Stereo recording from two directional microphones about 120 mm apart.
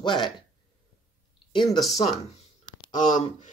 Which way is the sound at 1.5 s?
40° left (ahead or behind).